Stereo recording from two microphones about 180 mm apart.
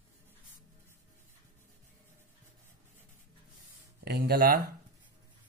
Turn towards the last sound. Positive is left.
turn(degrees=-55)  # may be behind; listen again after turning